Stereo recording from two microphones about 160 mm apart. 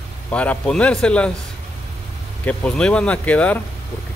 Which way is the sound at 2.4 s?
5° left (ahead or behind).